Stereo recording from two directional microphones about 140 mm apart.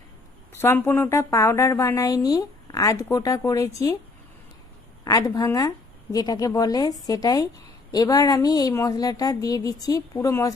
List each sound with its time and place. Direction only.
0.6 s a woman's voice: 15° left (ahead or behind)
5.0 s a woman's voice: 25° left (ahead or behind)